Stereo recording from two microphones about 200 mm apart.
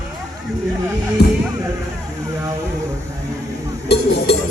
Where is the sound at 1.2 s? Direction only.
55° left (ahead or behind).